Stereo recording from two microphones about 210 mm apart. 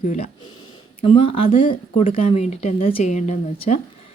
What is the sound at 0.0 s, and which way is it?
Speech, 35° left (ahead or behind).